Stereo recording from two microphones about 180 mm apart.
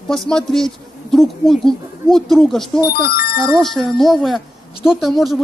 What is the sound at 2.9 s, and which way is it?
Speech, 60° left (ahead or behind).